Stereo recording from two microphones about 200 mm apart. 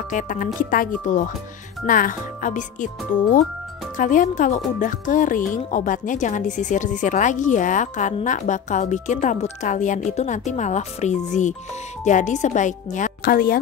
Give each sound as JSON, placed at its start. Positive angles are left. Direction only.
{"t": 0.1, "sound": "a woman's voice", "side_deg": 40}
{"t": 3.9, "sound": "speech", "side_deg": 40}